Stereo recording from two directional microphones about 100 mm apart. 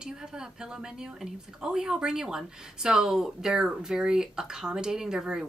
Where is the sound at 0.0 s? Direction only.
5° right (ahead or behind).